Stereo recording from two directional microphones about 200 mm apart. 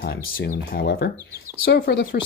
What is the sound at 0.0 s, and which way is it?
Speech, 50° left (ahead or behind).